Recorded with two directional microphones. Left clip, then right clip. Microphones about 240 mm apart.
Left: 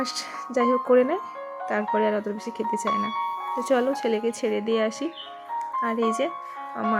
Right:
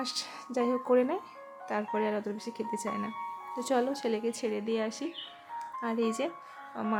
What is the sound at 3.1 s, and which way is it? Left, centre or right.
Music, left.